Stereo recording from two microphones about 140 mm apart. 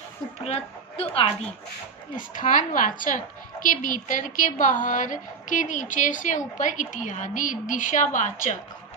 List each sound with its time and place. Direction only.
0.4 s a woman's voice: 45° left (ahead or behind)
2.1 s a woman's voice: 65° left (ahead or behind)